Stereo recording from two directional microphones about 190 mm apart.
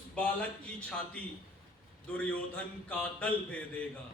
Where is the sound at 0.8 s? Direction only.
5° left (ahead or behind).